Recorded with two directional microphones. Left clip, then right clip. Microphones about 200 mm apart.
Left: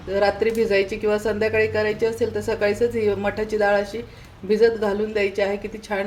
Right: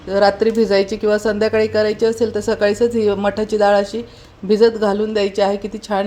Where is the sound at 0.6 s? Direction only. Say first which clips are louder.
Right 5 dB; 25° right (ahead or behind).